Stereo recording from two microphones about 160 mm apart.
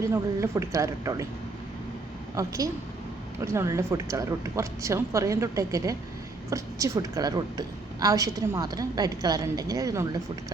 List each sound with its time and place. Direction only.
0.0 s a woman's voice: 15° right (ahead or behind)
2.3 s a woman's voice: 20° right (ahead or behind)